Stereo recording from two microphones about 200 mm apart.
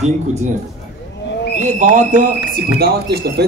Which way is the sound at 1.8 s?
40° right (ahead or behind).